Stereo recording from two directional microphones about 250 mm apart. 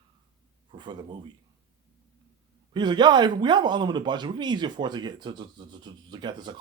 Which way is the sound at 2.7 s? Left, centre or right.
Centre.